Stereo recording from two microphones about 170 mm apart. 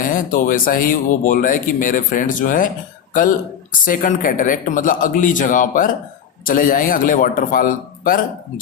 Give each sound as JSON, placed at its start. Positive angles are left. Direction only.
{"t": 0.0, "sound": "speech", "side_deg": 50}